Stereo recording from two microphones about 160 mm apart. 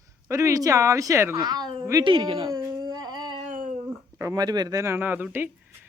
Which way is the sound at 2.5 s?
20° right (ahead or behind).